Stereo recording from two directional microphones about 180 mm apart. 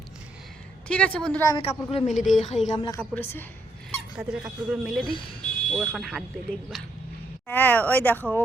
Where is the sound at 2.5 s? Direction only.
40° left (ahead or behind).